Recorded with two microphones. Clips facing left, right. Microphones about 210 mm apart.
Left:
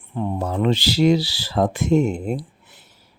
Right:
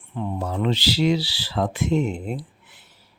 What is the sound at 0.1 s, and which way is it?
Speech, 45° left (ahead or behind).